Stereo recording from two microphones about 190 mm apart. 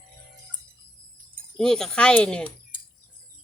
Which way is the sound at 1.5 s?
5° left (ahead or behind).